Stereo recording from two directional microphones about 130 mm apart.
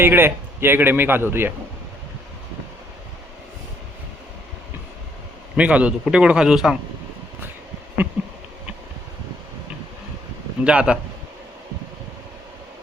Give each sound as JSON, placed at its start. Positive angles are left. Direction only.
{"t": 0.0, "sound": "speech", "side_deg": -15}
{"t": 5.5, "sound": "speech", "side_deg": -10}
{"t": 10.6, "sound": "speech", "side_deg": -10}